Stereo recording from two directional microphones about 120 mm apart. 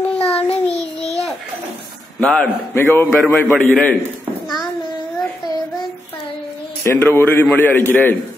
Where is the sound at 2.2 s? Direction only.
10° left (ahead or behind).